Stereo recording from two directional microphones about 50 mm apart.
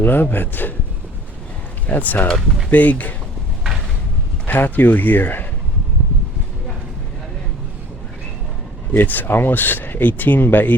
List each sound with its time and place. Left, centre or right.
0.0 s speech: left
1.9 s speech: left
4.4 s speech: left
8.9 s speech: left